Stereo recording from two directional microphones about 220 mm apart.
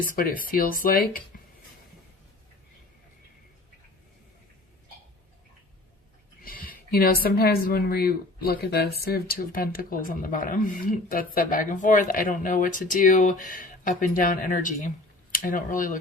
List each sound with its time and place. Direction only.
0.0 s speech: 40° left (ahead or behind)
6.4 s speech: 40° left (ahead or behind)